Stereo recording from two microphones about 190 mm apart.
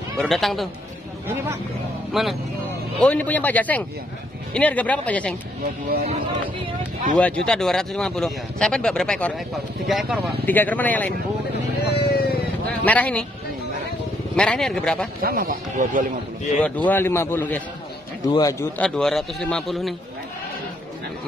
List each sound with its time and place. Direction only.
0.2 s a man's voice: centre (ahead or behind)
2.1 s a man's voice: centre (ahead or behind)
7.2 s a man's voice: 5° left (ahead or behind)
10.4 s a man's voice: 10° left (ahead or behind)
11.9 s vehicle: 55° left (ahead or behind)
12.8 s a man's voice: 10° left (ahead or behind)
14.3 s a man's voice: 5° left (ahead or behind)
15.2 s speech: 50° right (ahead or behind)
16.6 s a man's voice: 10° left (ahead or behind)
18.9 s a man's voice: 5° left (ahead or behind)